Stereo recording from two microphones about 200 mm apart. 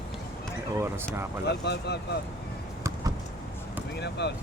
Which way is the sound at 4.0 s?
55° left (ahead or behind).